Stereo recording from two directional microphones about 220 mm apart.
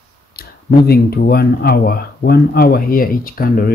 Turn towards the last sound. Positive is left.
turn(degrees=40)  # may be behind; listen again after turning